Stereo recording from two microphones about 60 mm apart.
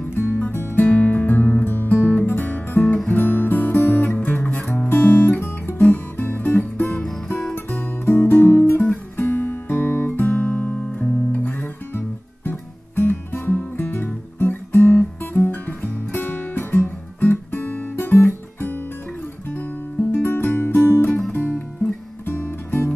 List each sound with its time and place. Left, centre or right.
0.1 s music: left
3.1 s guitar: left
6.1 s music: left
13.6 s guitar: left
20.0 s music: left